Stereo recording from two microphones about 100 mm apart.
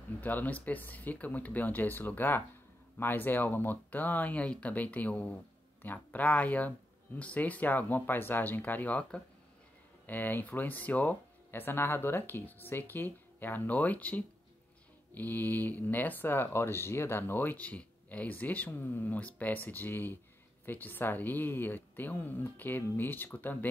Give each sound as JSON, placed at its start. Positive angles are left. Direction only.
{"t": 0.2, "sound": "speech", "side_deg": 15}